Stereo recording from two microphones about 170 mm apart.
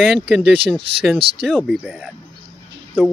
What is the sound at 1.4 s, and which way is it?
Speech, centre (ahead or behind).